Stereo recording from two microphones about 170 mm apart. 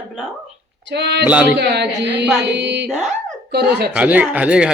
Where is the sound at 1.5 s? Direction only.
80° right.